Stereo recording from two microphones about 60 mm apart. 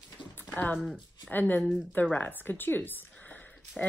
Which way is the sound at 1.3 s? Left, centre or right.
Left.